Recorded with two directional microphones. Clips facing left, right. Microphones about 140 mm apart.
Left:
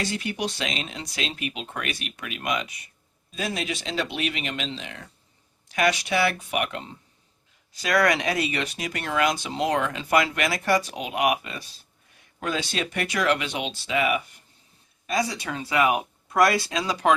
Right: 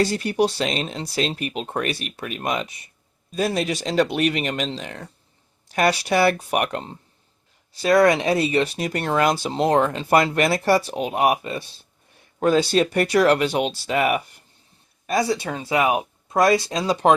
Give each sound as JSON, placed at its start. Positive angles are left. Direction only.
{"t": 0.0, "sound": "speech", "side_deg": -40}
{"t": 7.8, "sound": "speech", "side_deg": -30}
{"t": 15.0, "sound": "speech", "side_deg": -35}